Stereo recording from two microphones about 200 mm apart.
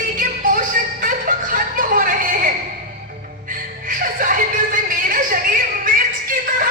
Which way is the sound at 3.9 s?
45° right (ahead or behind).